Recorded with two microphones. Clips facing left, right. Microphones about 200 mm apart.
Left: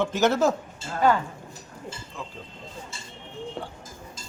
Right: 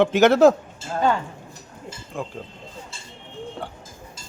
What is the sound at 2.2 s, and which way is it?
Speech, 50° right (ahead or behind).